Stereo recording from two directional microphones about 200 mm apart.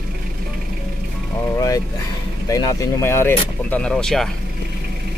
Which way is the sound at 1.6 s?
15° left (ahead or behind).